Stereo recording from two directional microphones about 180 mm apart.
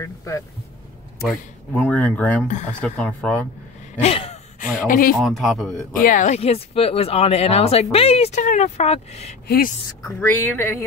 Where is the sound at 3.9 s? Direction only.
35° left (ahead or behind).